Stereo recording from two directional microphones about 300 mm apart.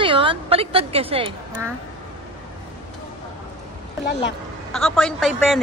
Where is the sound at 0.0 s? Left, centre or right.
Centre.